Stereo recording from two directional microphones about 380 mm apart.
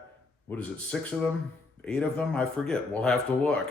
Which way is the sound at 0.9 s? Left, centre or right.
Centre.